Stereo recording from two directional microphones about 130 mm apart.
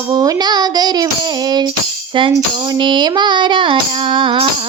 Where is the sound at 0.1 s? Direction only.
30° right (ahead or behind).